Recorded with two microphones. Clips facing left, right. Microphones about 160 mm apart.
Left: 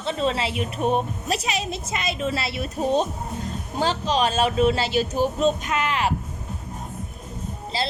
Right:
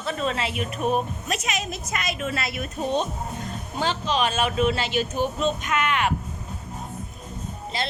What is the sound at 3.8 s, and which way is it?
A woman's voice, 40° left (ahead or behind).